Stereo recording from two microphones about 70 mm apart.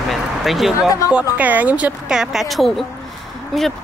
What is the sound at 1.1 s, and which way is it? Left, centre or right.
Speech, right.